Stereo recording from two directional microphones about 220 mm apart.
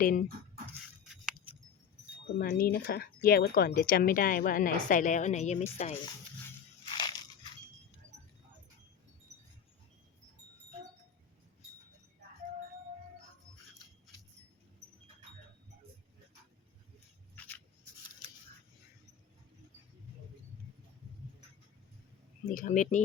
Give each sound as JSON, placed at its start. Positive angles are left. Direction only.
{"t": 0.0, "sound": "speech", "side_deg": 40}
{"t": 1.0, "sound": "a sound", "side_deg": -5}
{"t": 2.4, "sound": "speech", "side_deg": 45}
{"t": 6.9, "sound": "crushing", "side_deg": 20}
{"t": 22.4, "sound": "speech", "side_deg": 35}